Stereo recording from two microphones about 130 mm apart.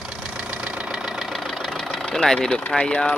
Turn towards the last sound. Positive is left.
turn(degrees=5)  # may be behind; listen again after turning